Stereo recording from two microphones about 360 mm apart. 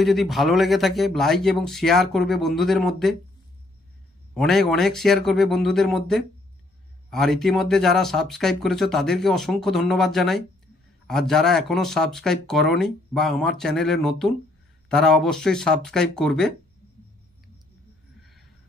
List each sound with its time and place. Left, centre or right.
0.0 s speech: centre
4.3 s speech: centre